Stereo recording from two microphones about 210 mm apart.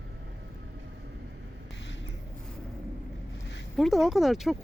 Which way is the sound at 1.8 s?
60° left (ahead or behind).